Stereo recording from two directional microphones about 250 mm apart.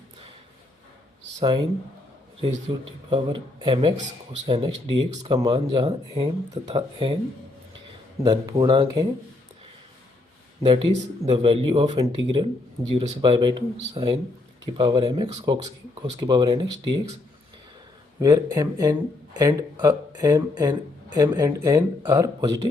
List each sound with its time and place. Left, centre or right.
1.4 s speech: centre
2.7 s speech: centre
8.2 s speech: centre
10.6 s speech: right
18.2 s speech: centre